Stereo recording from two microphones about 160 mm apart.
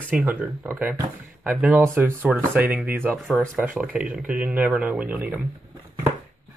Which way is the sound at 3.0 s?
5° left (ahead or behind).